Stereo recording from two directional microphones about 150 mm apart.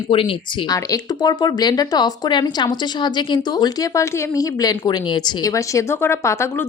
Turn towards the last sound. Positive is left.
turn(degrees=15)  # may be behind; listen again after turning